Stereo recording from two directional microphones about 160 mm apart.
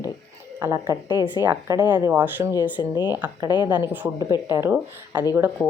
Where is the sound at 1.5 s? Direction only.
20° right (ahead or behind).